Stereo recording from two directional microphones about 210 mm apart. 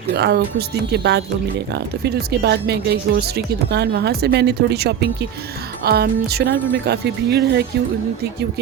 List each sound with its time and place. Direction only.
0.1 s speech: 50° right (ahead or behind)